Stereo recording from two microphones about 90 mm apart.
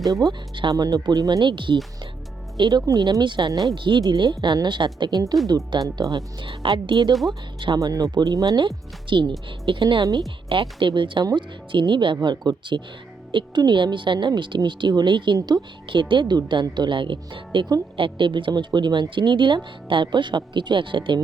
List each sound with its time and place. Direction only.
0.1 s speech: 45° right (ahead or behind)
1.5 s speech: 65° right (ahead or behind)
2.6 s speech: 50° right (ahead or behind)
6.4 s speech: 65° right (ahead or behind)
7.1 s speech: centre (ahead or behind)
7.8 s speech: 45° right (ahead or behind)
8.5 s a woman's voice: 65° right (ahead or behind)